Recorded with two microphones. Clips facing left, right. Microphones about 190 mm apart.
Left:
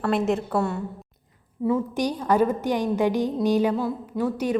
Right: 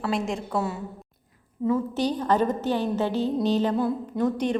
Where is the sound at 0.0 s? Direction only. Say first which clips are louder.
Left 4 dB; centre (ahead or behind).